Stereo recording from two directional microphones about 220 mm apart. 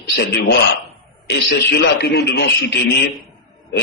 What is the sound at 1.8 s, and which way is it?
Speech, 45° left (ahead or behind).